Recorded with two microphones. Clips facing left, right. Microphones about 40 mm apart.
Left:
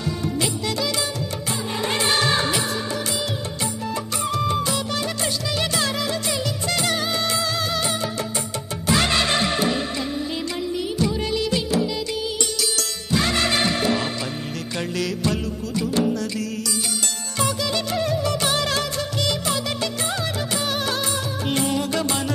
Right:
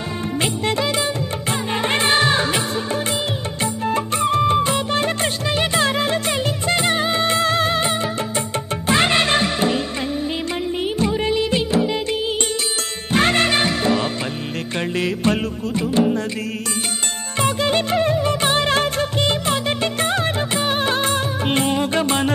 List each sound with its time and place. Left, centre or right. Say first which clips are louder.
0.4 s music: right 7 dB; right
10.8 s music: right 4 dB; right
17.4 s music: right 5 dB; right